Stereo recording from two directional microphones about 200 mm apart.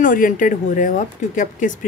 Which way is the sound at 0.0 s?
40° left (ahead or behind).